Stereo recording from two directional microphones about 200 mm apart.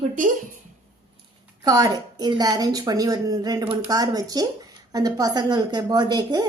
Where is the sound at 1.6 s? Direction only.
20° right (ahead or behind).